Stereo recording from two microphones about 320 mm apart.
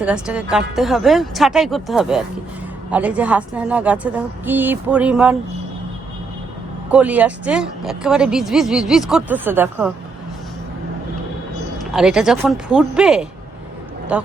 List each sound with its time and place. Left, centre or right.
0.0 s speech: centre
6.9 s speech: centre
11.8 s speech: centre